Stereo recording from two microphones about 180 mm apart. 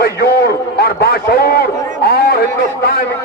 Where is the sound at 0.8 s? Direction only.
60° left (ahead or behind).